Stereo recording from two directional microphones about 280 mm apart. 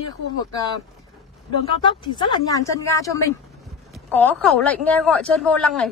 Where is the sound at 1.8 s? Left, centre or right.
Centre.